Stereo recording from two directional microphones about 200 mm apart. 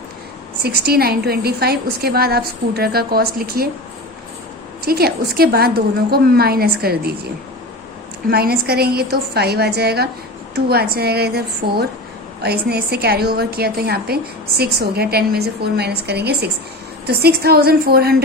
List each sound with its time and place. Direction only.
0.6 s a woman's voice: 50° right (ahead or behind)
4.9 s a woman's voice: 50° right (ahead or behind)
8.3 s a woman's voice: 50° right (ahead or behind)